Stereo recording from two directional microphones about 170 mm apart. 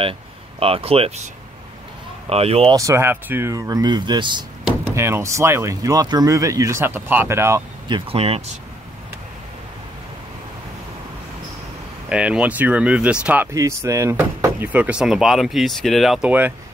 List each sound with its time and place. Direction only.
0.6 s speech: 35° right (ahead or behind)
2.2 s speech: 35° right (ahead or behind)
2.7 s speech: 20° right (ahead or behind)
4.9 s speech: 15° right (ahead or behind)
7.9 s speech: 35° right (ahead or behind)
12.1 s speech: 5° right (ahead or behind)